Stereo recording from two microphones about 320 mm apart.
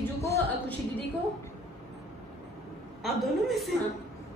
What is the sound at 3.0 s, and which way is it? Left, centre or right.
Speech, centre.